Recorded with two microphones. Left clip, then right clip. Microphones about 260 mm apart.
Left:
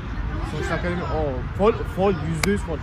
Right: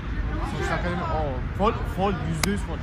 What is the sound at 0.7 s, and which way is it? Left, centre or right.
Speech, centre.